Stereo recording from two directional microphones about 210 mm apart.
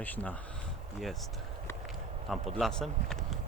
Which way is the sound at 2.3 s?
Centre (ahead or behind).